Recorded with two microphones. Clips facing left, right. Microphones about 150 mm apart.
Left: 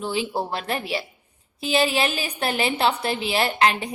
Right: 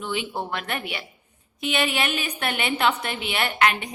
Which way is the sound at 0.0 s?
35° left (ahead or behind).